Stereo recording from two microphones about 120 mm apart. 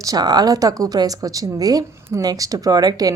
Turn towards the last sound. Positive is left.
turn(degrees=-30)  # may be behind; listen again after turning